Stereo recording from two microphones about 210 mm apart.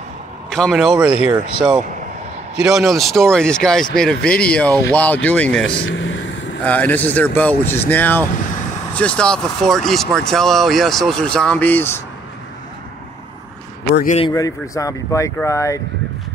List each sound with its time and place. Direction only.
0.5 s speech: centre (ahead or behind)
5.9 s vehicle: 65° left (ahead or behind)
6.6 s speech: 10° left (ahead or behind)
13.9 s a man's voice: 35° left (ahead or behind)
14.2 s speech: 15° left (ahead or behind)